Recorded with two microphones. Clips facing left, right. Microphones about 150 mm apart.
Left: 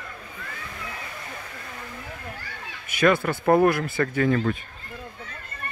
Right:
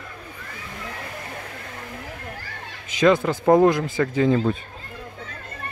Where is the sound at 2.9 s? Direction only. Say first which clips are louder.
Right 3 dB; 15° right (ahead or behind).